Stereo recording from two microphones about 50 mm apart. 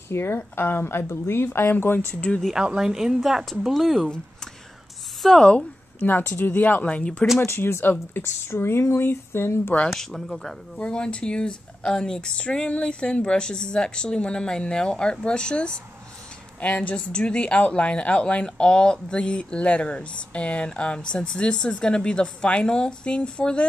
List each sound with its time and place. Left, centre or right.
0.1 s speech: left
2.1 s speech: centre
2.5 s speech: centre
5.2 s speech: centre
5.9 s speech: left
7.4 s speech: left
8.2 s speech: left
9.9 s speech: centre
10.8 s speech: left